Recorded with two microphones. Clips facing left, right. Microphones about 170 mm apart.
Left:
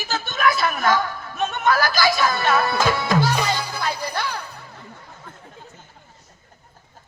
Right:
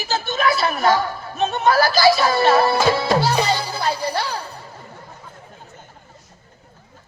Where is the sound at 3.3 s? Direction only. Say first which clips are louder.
Right 3 dB; 30° right (ahead or behind).